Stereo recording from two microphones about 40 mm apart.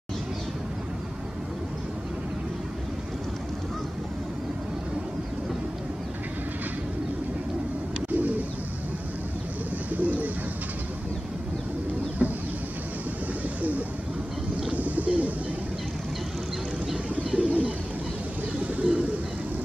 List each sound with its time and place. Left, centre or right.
8.1 s bird: right
9.9 s bird: right
12.2 s chicken: right
13.6 s bird: right
17.1 s bird: right
18.9 s bird: right